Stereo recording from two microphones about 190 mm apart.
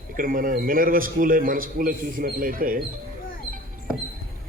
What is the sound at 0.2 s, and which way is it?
A man's voice, 45° right (ahead or behind).